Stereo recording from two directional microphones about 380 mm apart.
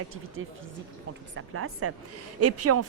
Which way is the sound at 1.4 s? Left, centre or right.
Right.